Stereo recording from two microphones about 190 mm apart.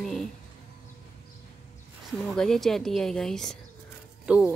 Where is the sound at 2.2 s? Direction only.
5° left (ahead or behind).